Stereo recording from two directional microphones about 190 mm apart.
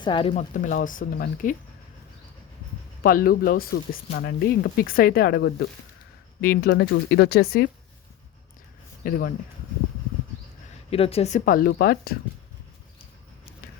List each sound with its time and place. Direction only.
0.0 s speech: 25° left (ahead or behind)
0.3 s speech: 40° left (ahead or behind)
3.0 s speech: 50° left (ahead or behind)
9.0 s speech: 50° left (ahead or behind)
10.9 s speech: 30° left (ahead or behind); by 12.1 s 55° left (ahead or behind)